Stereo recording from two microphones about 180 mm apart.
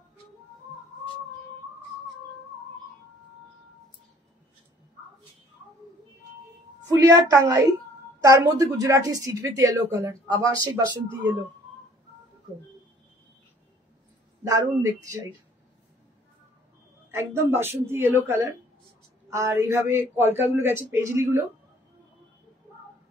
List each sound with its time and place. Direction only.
6.9 s a man's voice: 20° right (ahead or behind)
14.8 s a man's voice: 15° right (ahead or behind)
17.1 s a man's voice: 15° right (ahead or behind)